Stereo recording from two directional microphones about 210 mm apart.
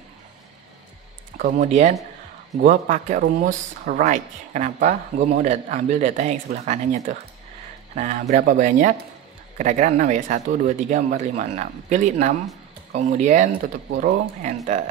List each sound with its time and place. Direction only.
1.4 s speech: 35° right (ahead or behind)
13.5 s speech: 50° right (ahead or behind)